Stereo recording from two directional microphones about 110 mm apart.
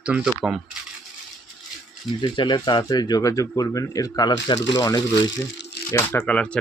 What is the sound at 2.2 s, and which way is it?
Speech, 45° left (ahead or behind).